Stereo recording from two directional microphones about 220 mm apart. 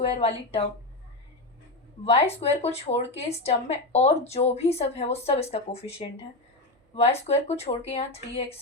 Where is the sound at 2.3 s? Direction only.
30° left (ahead or behind).